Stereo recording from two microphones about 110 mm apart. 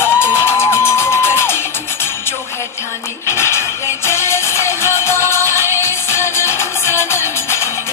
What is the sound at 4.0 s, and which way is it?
Music, 25° left (ahead or behind).